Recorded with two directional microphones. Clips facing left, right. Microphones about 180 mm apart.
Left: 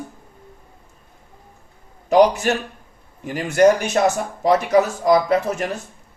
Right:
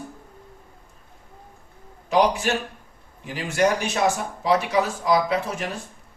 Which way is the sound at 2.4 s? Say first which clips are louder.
Left 4 dB; 50° left (ahead or behind).